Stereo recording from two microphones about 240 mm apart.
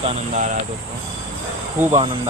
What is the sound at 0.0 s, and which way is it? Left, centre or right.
Speech, right.